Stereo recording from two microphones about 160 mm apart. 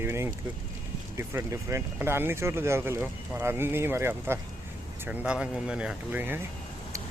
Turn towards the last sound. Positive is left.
turn(degrees=-10)  # may be behind; listen again after turning